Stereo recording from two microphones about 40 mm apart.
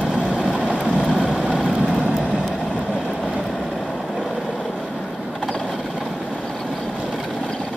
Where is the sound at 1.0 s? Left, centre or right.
Centre.